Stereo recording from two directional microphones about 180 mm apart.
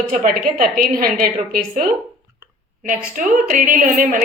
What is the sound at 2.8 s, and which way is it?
A woman's voice, 45° right (ahead or behind).